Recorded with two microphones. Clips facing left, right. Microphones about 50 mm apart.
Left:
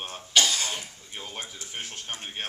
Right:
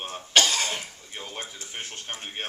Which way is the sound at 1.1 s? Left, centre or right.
Centre.